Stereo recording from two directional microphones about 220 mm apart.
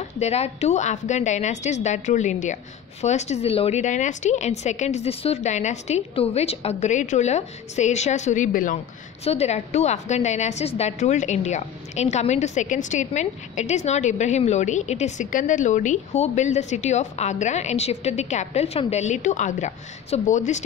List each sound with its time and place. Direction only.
0.2 s a woman's voice: 30° left (ahead or behind)